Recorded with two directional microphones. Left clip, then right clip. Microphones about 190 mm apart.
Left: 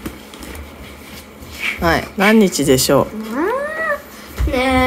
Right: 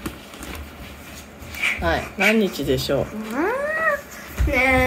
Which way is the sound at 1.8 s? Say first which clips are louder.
Left 7 dB; 50° left (ahead or behind).